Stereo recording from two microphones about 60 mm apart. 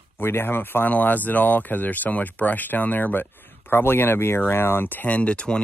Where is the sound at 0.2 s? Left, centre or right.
Left.